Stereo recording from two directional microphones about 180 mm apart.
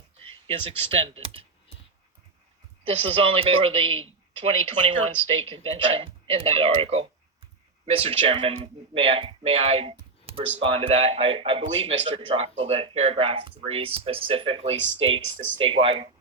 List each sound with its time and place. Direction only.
0.3 s speech: 30° right (ahead or behind)
2.8 s speech: 30° right (ahead or behind)